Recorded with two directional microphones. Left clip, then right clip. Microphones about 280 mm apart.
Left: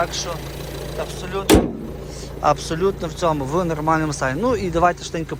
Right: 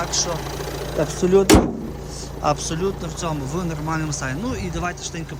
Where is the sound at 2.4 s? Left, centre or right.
Centre.